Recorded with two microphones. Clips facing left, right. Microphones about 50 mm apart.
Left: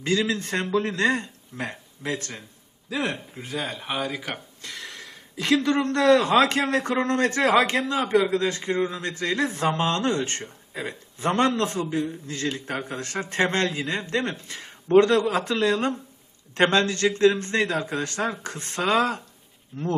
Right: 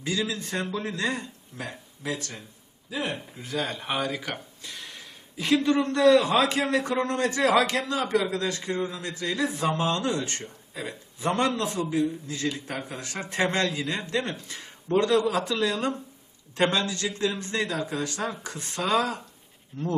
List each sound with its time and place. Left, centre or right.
0.0 s a man's voice: left
2.9 s speech: left
3.5 s speech: centre
4.6 s a sound: left
5.6 s a man's voice: left